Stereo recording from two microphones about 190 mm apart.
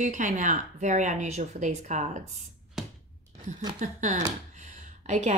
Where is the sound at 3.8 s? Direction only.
40° right (ahead or behind).